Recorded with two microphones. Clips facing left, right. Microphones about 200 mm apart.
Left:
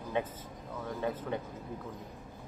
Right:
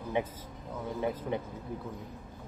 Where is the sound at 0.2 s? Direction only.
15° right (ahead or behind).